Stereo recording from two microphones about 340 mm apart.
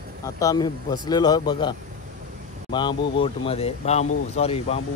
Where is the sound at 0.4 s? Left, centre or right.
Centre.